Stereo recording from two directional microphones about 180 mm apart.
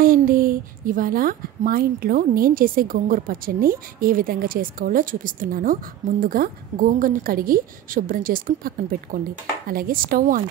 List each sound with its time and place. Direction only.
0.0 s a woman's voice: 50° right (ahead or behind)